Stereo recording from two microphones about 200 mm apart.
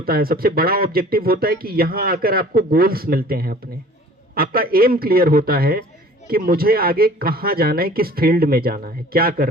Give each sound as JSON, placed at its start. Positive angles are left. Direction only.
{"t": 0.0, "sound": "speech", "side_deg": -50}